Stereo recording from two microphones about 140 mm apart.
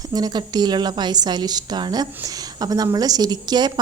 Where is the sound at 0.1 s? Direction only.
30° right (ahead or behind).